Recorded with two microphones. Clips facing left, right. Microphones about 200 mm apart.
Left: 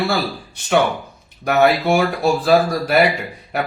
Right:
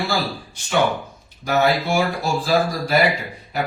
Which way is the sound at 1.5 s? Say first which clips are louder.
Left 4 dB; 60° left (ahead or behind).